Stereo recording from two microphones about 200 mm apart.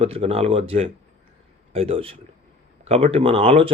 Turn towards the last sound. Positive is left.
turn(degrees=-30)  # may be behind; listen again after turning